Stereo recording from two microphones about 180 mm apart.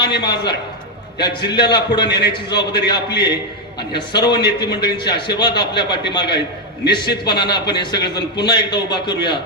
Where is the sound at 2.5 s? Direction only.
65° left (ahead or behind).